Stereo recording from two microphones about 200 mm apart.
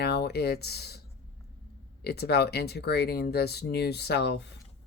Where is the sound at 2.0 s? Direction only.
55° left (ahead or behind).